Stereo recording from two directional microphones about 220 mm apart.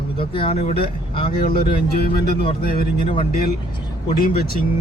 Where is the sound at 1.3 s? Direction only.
45° left (ahead or behind).